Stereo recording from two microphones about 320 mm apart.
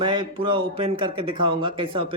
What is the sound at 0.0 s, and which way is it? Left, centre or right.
Speech, centre.